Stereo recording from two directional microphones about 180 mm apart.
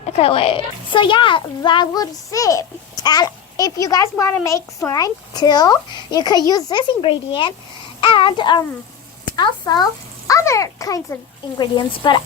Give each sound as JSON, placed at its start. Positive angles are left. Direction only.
{"t": 0.2, "sound": "a child's voice", "side_deg": 30}